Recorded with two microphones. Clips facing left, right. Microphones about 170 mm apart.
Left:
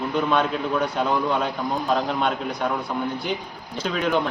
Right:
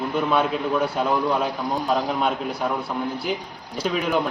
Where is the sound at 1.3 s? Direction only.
5° right (ahead or behind).